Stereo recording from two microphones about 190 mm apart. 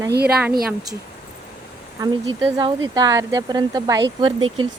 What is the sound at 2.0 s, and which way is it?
Speech, 20° right (ahead or behind).